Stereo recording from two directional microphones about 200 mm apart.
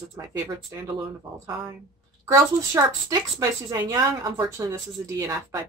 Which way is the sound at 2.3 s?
20° right (ahead or behind).